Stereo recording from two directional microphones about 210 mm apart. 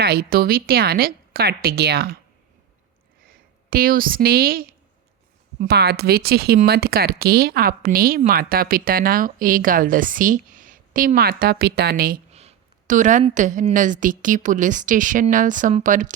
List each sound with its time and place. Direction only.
0.0 s speech: 45° right (ahead or behind)
3.7 s speech: 45° right (ahead or behind)
12.3 s a sound: 30° right (ahead or behind)
13.3 s a woman's voice: 35° right (ahead or behind)